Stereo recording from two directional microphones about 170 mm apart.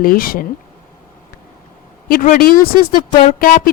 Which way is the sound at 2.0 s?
55° left (ahead or behind).